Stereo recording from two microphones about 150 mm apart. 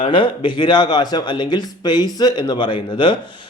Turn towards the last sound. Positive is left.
turn(degrees=30)  # may be behind; listen again after turning